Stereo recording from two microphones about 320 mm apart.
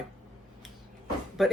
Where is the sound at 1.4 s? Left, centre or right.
Centre.